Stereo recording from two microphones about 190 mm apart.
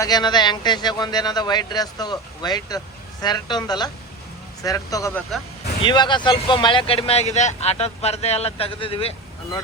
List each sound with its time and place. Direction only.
0.0 s speech: 20° left (ahead or behind)